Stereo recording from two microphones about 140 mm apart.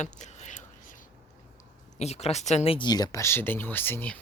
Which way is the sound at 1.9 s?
50° left (ahead or behind).